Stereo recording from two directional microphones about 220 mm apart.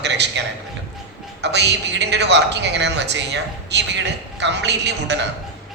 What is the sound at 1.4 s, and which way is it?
A man's voice, 50° right (ahead or behind).